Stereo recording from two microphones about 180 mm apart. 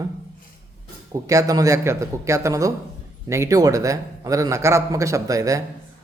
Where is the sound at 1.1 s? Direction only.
15° right (ahead or behind).